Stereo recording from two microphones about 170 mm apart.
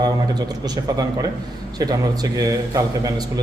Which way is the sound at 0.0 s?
25° right (ahead or behind).